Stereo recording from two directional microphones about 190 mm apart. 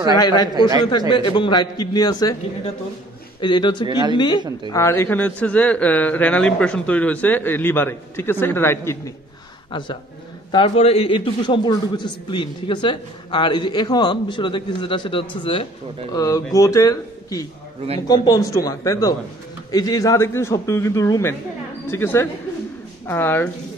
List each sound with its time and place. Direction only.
0.2 s a man's voice: 20° left (ahead or behind)
3.8 s speech: 25° right (ahead or behind)
4.6 s a man's voice: 15° left (ahead or behind)
9.7 s a man's voice: 25° left (ahead or behind)